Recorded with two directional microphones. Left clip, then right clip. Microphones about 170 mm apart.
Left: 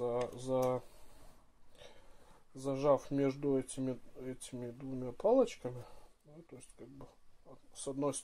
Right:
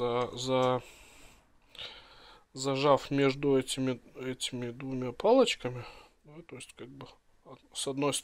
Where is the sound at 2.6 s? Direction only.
20° right (ahead or behind).